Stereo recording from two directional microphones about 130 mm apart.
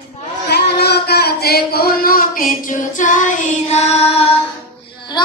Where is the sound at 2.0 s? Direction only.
90° left.